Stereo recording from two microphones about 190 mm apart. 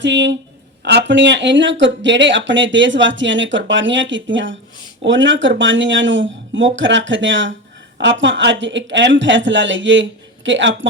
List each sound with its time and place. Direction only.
0.0 s speech: 70° right (ahead or behind)